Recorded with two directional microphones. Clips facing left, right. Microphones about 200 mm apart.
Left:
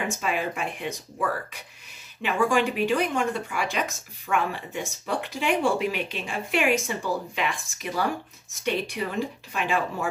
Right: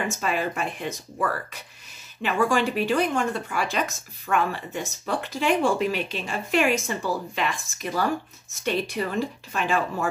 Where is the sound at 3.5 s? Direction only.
15° left (ahead or behind).